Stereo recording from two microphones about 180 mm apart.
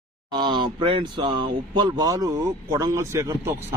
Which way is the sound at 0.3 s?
25° right (ahead or behind).